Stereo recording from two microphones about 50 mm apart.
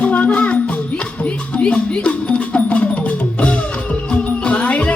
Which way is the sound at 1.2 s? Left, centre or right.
Left.